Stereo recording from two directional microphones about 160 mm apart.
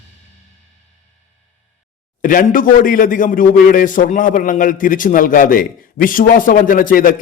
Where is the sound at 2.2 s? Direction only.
60° left (ahead or behind).